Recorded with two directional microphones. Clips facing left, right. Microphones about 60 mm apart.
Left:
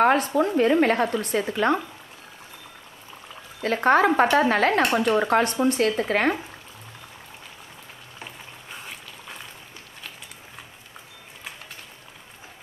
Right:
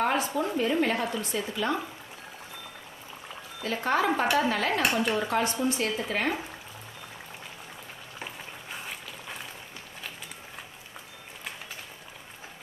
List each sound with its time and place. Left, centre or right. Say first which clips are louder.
0.0 s speech: left 7 dB; left
3.6 s speech: left 7 dB; left
8.2 s a sound: right 1 dB; centre